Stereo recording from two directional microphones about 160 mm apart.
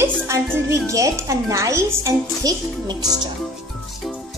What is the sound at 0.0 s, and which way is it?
A child's voice, 15° right (ahead or behind).